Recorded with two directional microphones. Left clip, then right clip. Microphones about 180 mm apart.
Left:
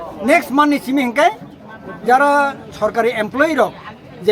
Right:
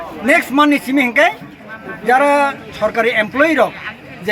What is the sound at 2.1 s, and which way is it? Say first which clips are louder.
Speech: right 1 dB; 20° left (ahead or behind).